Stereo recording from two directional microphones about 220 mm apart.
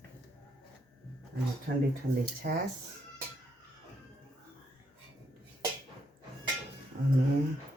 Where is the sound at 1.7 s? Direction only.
50° right (ahead or behind).